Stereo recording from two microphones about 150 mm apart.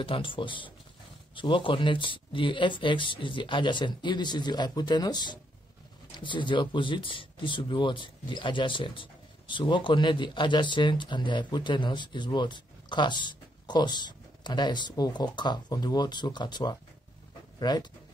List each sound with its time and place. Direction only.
0.0 s speech: 35° left (ahead or behind)